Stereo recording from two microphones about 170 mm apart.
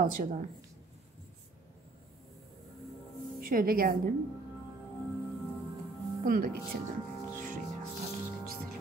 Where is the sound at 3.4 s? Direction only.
60° right (ahead or behind).